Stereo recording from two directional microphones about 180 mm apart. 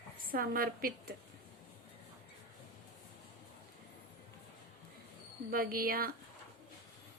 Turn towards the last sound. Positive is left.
turn(degrees=-55)  # may be behind; listen again after turning